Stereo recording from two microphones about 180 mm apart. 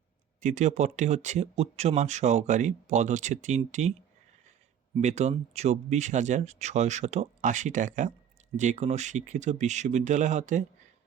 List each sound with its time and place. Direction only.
0.3 s speech: 40° right (ahead or behind)
4.9 s speech: 40° right (ahead or behind)